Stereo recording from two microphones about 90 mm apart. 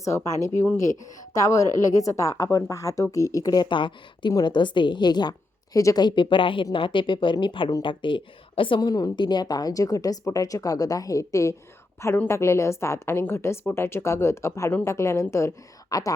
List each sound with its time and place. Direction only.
0.0 s a woman's voice: 35° left (ahead or behind); by 5.3 s 55° left (ahead or behind)
5.7 s a woman's voice: 40° left (ahead or behind)
6.1 s a woman's voice: 65° left (ahead or behind)
8.9 s a woman's voice: 45° left (ahead or behind)